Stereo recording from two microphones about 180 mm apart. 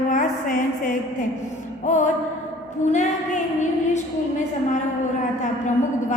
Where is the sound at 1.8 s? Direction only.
40° left (ahead or behind).